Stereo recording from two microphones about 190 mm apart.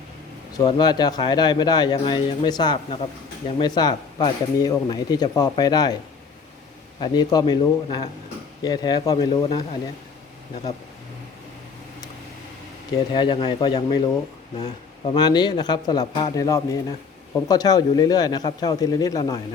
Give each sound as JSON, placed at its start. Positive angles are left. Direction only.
{"t": 0.5, "sound": "speech", "side_deg": 20}
{"t": 7.0, "sound": "speech", "side_deg": 20}
{"t": 13.1, "sound": "speech", "side_deg": 25}